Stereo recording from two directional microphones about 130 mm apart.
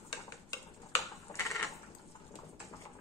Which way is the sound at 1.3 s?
25° left (ahead or behind).